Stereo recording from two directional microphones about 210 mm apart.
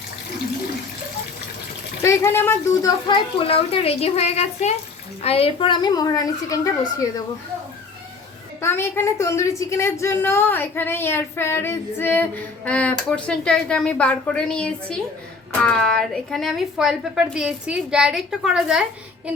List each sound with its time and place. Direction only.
2.0 s a woman's voice: 15° left (ahead or behind)
3.3 s a child's voice: 25° left (ahead or behind)
8.6 s a woman's voice: 10° left (ahead or behind)